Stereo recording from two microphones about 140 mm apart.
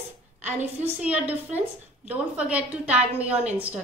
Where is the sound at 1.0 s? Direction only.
10° right (ahead or behind).